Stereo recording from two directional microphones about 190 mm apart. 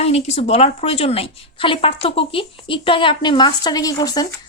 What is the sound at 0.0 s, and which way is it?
A woman's voice, 35° left (ahead or behind).